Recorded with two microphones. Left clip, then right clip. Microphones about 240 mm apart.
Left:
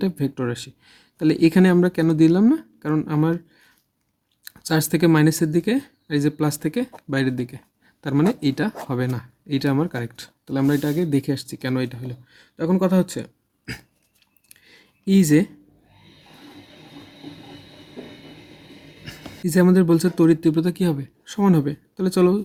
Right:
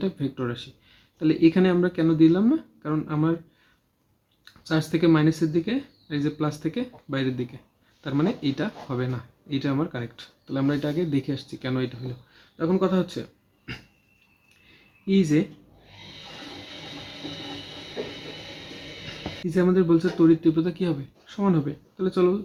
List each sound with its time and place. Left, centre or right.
0.0 s speech: left
4.4 s speech: left
15.0 s speech: left
19.0 s speech: left